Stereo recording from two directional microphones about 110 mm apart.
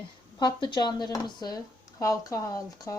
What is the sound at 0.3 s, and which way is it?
Speech, 40° left (ahead or behind).